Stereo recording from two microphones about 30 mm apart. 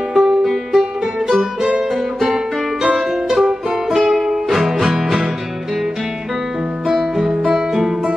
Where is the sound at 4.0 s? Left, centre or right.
Centre.